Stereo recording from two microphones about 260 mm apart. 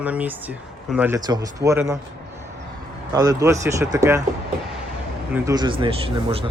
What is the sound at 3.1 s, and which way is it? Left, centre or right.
Speech, centre.